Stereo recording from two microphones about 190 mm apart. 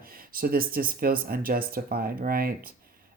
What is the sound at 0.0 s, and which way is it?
Speech, 50° right (ahead or behind).